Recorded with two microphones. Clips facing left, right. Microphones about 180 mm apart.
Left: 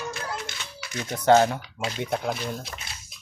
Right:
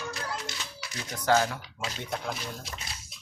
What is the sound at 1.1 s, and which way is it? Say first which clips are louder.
Speech: left 7 dB; 25° left (ahead or behind).